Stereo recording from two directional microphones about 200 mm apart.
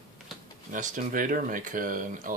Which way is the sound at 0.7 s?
40° right (ahead or behind).